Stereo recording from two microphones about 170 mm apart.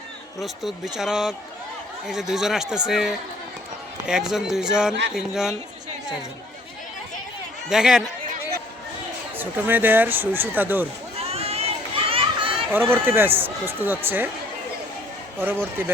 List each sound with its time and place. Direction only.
0.3 s speech: centre (ahead or behind)
7.7 s speech: 5° right (ahead or behind)
9.4 s speech: 10° right (ahead or behind)
11.2 s children playing: 35° right (ahead or behind)
12.7 s speech: 10° right (ahead or behind)